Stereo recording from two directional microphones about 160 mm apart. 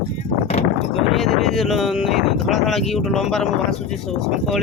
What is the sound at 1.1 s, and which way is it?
Speech, centre (ahead or behind).